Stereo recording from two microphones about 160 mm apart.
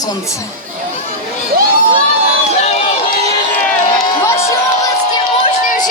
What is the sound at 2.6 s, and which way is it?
Crowd, 40° left (ahead or behind).